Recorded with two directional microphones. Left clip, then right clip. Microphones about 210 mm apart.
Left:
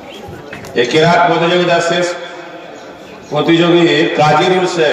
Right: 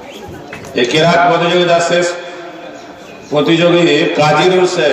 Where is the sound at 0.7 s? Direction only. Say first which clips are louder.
Even; 45° right (ahead or behind).